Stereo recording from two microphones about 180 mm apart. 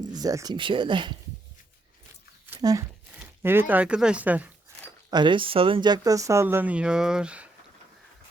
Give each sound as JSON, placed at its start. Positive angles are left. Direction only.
{"t": 0.1, "sound": "speech", "side_deg": -20}
{"t": 2.6, "sound": "speech", "side_deg": -20}
{"t": 5.1, "sound": "speech", "side_deg": -25}